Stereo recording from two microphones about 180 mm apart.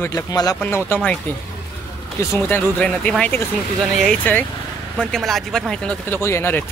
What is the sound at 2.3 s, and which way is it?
Speech, 10° left (ahead or behind).